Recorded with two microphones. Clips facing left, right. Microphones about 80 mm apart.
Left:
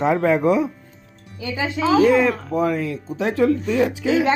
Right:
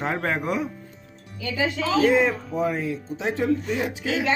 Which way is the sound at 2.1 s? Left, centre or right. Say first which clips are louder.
Left 3 dB; left.